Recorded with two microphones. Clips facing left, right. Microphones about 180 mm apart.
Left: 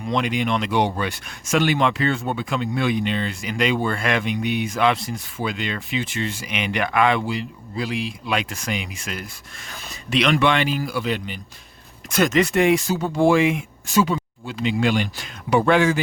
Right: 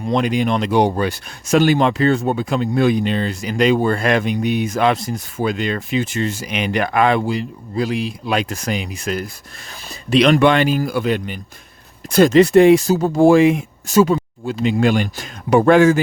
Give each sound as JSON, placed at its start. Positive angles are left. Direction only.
{"t": 0.0, "sound": "speech", "side_deg": -40}
{"t": 12.0, "sound": "speech", "side_deg": -30}